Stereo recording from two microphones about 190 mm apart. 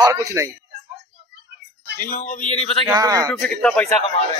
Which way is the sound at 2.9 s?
20° right (ahead or behind).